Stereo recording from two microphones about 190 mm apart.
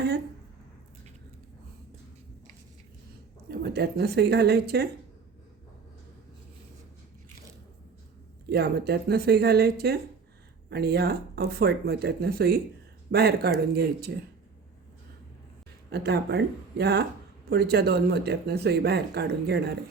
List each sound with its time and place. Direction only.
3.5 s speech: 55° right (ahead or behind)
8.4 s speech: 55° right (ahead or behind)
15.9 s speech: 60° right (ahead or behind)